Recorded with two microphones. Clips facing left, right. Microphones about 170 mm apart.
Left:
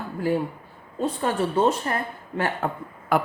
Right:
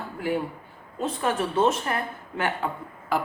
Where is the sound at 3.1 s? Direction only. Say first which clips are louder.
Left 4 dB; 55° left (ahead or behind).